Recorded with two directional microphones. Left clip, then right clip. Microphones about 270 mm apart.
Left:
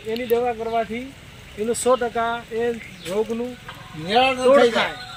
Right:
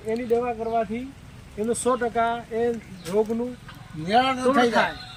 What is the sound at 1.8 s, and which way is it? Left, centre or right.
Speech, centre.